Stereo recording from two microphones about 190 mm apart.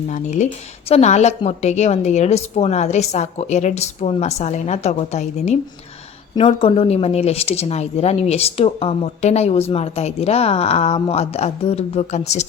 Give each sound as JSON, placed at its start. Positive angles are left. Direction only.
{"t": 0.1, "sound": "speech", "side_deg": 40}